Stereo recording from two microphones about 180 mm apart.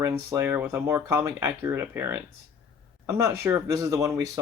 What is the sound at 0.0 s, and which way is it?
Speech, 15° right (ahead or behind).